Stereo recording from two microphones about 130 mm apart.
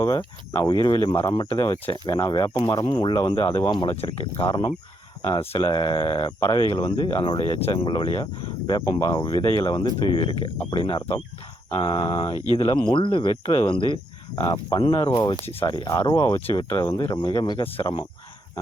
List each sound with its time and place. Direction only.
0.0 s speech: 30° left (ahead or behind)
8.6 s speech: 25° left (ahead or behind)